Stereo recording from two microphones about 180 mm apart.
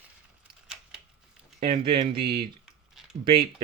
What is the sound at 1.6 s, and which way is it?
Speech, 30° right (ahead or behind).